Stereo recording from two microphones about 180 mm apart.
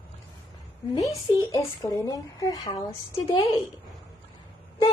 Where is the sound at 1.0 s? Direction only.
20° left (ahead or behind).